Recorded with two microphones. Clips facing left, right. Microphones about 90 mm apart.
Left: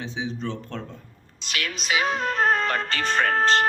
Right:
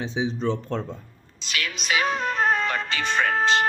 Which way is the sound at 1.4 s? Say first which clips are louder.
Even; 50° left (ahead or behind).